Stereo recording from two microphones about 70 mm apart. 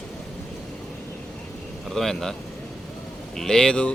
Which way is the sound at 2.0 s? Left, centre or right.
Centre.